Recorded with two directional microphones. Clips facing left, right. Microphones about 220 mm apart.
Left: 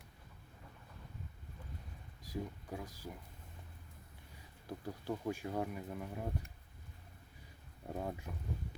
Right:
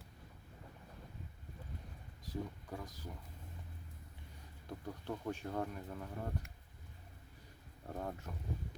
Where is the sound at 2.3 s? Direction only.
10° left (ahead or behind).